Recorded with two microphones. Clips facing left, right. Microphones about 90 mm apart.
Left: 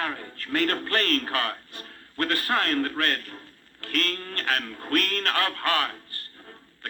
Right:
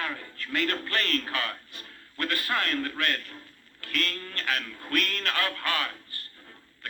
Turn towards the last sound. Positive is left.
turn(degrees=45)  # may be behind; listen again after turning